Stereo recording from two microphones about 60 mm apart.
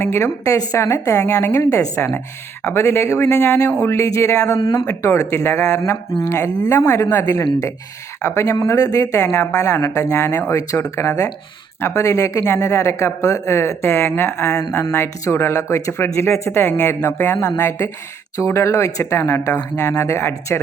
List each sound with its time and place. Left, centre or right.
0.0 s speech: left
0.5 s speech: left
2.6 s speech: left
9.1 s speech: left
10.1 s speech: left
12.5 s speech: left
19.1 s speech: left